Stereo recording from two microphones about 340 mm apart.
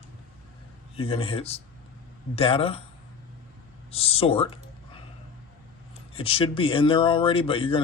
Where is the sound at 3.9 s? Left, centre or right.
Centre.